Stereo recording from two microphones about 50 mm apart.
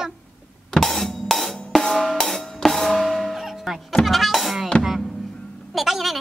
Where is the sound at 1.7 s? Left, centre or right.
Centre.